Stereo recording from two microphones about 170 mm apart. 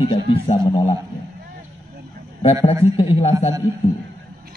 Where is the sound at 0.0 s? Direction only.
35° left (ahead or behind).